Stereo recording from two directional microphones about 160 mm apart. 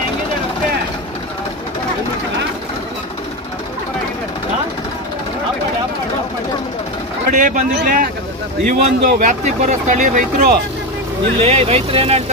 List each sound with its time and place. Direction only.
7.3 s speech: 50° right (ahead or behind)
11.4 s speech: 40° right (ahead or behind)